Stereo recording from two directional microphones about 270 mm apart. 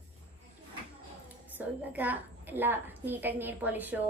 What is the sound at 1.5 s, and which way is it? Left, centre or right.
A woman's voice, centre.